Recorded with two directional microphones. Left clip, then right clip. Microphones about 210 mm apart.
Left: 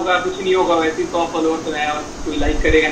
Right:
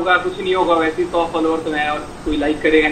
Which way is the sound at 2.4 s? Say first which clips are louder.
Right 1 dB; 35° right (ahead or behind).